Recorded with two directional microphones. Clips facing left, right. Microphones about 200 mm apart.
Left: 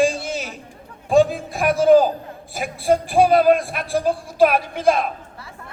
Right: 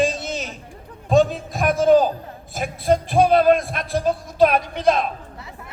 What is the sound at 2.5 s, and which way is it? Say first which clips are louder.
A man's voice: left 1 dB; 10° left (ahead or behind).